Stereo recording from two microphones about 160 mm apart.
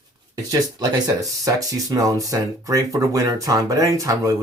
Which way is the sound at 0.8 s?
25° right (ahead or behind).